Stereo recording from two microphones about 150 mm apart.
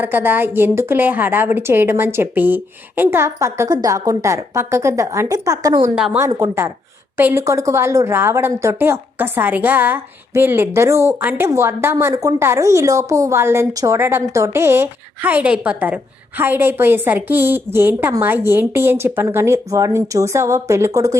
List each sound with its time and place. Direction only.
0.0 s a woman's voice: 15° right (ahead or behind)